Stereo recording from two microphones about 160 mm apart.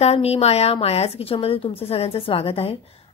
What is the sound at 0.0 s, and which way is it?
A woman's voice, 40° left (ahead or behind).